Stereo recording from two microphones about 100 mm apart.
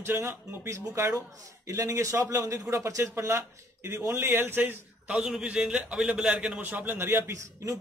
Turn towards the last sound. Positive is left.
turn(degrees=-25)  # may be behind; listen again after turning